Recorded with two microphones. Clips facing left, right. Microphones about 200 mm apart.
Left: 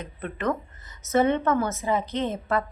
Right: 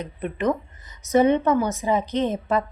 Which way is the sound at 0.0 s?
15° right (ahead or behind).